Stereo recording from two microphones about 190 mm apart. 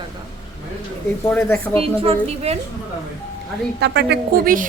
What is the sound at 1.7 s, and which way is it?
Speech, 30° right (ahead or behind).